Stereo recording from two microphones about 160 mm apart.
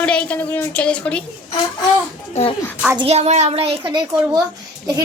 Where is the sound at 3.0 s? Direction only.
40° right (ahead or behind).